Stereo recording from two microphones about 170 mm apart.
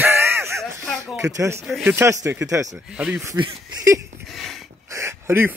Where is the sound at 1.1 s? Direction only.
20° right (ahead or behind).